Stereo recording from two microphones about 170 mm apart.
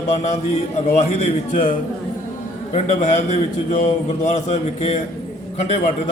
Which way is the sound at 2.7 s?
45° left (ahead or behind).